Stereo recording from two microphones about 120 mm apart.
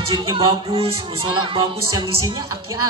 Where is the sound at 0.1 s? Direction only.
40° right (ahead or behind).